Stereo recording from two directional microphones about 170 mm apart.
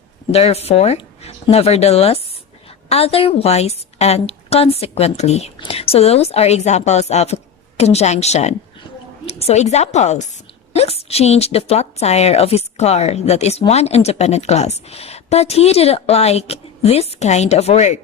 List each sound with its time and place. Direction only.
0.3 s a woman's voice: 35° left (ahead or behind)